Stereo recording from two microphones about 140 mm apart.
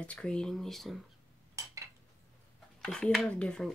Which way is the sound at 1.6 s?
20° right (ahead or behind).